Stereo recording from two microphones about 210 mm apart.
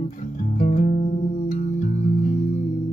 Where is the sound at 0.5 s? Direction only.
35° left (ahead or behind).